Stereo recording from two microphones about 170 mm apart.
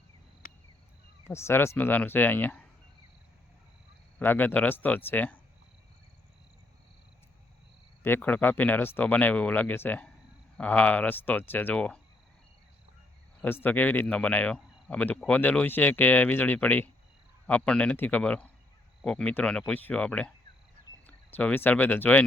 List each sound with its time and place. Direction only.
0.4 s cricket: 55° left (ahead or behind)
1.3 s speech: 15° left (ahead or behind)
4.2 s speech: 10° left (ahead or behind)
8.0 s speech: 10° left (ahead or behind)
13.4 s speech: 10° left (ahead or behind)